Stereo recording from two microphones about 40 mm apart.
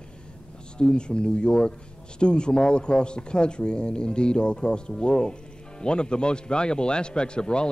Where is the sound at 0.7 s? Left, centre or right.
Left.